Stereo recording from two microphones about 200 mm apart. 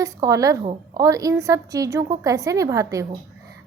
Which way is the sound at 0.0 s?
15° right (ahead or behind).